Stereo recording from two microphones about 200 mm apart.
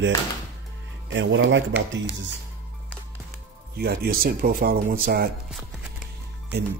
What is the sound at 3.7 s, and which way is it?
Speech, 50° right (ahead or behind).